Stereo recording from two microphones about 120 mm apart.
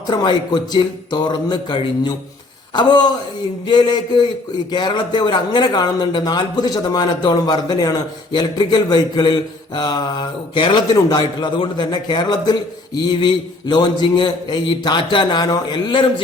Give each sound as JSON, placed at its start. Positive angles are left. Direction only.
{"t": 0.1, "sound": "a man's voice", "side_deg": 40}